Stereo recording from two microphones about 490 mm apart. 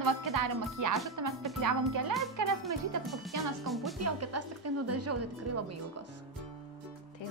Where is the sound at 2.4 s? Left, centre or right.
Right.